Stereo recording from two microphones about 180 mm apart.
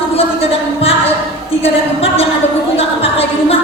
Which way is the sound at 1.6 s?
35° left (ahead or behind).